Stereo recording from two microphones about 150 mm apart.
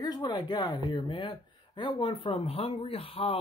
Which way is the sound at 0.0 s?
25° left (ahead or behind).